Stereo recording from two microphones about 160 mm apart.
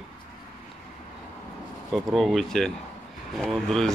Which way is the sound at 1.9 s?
Centre (ahead or behind).